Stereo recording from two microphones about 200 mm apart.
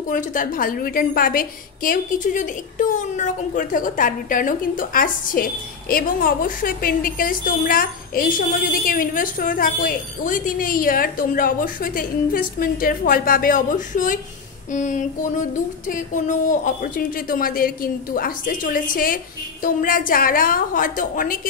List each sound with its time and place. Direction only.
0.1 s a woman's voice: 40° left (ahead or behind)